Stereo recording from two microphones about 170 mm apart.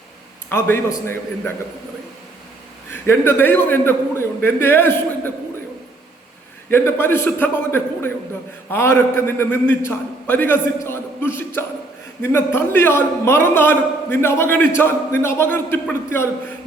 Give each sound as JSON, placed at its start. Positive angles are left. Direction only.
{"t": 0.5, "sound": "a man's voice", "side_deg": 15}
{"t": 2.9, "sound": "a man's voice", "side_deg": 10}
{"t": 6.7, "sound": "a man's voice", "side_deg": 15}